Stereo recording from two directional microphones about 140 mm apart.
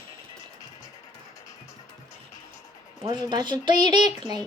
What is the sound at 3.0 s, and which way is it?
A woman's voice, 30° right (ahead or behind).